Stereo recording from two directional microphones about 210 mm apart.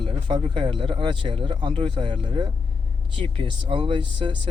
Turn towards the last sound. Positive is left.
turn(degrees=-25)  # may be behind; listen again after turning